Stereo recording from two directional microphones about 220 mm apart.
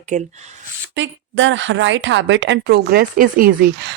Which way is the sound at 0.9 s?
55° right (ahead or behind).